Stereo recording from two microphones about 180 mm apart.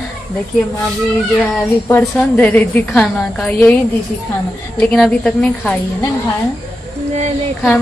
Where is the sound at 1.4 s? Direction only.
5° left (ahead or behind).